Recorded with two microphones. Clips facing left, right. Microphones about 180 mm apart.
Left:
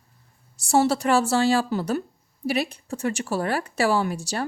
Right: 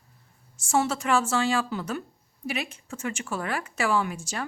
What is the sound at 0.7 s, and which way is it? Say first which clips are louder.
Speech: left 5 dB; 35° left (ahead or behind).